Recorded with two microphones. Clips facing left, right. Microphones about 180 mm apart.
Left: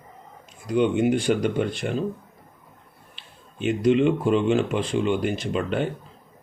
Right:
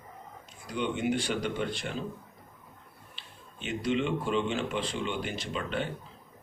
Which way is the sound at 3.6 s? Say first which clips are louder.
Left 10 dB; 55° left (ahead or behind).